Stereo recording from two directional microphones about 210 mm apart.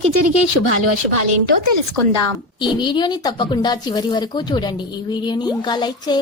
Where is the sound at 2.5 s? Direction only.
20° left (ahead or behind).